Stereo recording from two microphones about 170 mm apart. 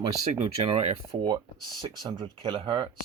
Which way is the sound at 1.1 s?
30° right (ahead or behind).